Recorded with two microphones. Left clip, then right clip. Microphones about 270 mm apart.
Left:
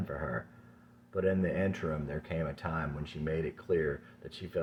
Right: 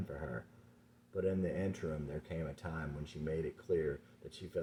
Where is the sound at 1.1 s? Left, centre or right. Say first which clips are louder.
Left 6 dB; centre.